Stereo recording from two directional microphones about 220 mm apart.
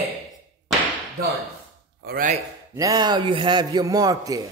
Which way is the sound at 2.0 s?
40° right (ahead or behind).